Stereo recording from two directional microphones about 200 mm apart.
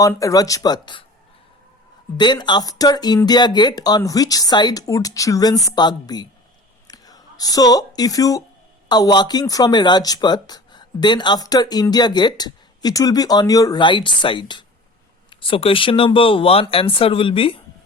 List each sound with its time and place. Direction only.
0.0 s speech: 15° left (ahead or behind)
2.1 s speech: 20° left (ahead or behind)